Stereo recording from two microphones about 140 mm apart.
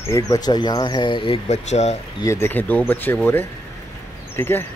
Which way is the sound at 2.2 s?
20° left (ahead or behind).